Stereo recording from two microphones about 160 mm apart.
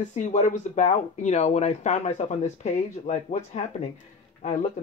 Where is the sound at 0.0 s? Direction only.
50° left (ahead or behind).